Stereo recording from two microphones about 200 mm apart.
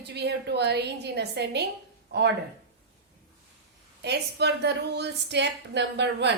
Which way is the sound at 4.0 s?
55° right (ahead or behind).